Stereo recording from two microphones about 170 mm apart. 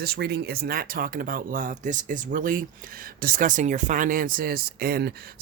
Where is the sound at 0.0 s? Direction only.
70° right (ahead or behind).